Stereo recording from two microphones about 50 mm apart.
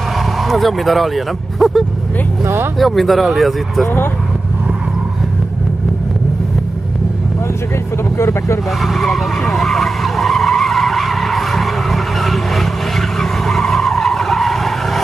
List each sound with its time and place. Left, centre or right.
0.5 s speech: centre
2.4 s speech: right
2.8 s speech: centre
8.2 s speech: left
8.8 s vehicle: centre
13.2 s skidding: centre